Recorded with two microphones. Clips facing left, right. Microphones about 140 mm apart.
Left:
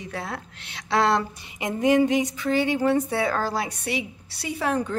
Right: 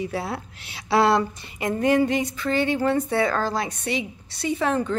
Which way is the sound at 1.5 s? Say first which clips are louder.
Even; 15° left (ahead or behind).